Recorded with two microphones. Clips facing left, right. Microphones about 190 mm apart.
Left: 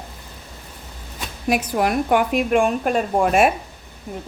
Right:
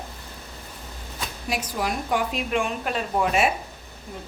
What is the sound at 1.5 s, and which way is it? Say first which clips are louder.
A woman's voice: left 8 dB; 60° left (ahead or behind).